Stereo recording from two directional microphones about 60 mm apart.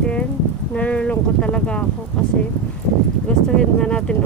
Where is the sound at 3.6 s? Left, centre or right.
Centre.